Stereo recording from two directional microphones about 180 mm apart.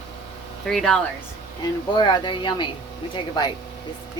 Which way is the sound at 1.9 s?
25° left (ahead or behind).